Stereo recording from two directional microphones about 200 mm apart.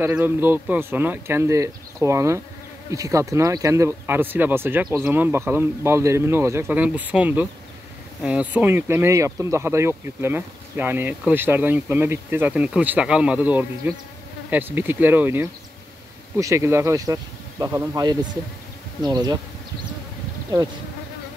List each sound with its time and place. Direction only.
0.0 s speech: 10° right (ahead or behind)
19.0 s bee: 20° right (ahead or behind)